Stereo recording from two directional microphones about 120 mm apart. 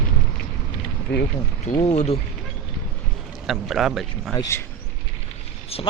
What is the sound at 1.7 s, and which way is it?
Speech, 50° left (ahead or behind).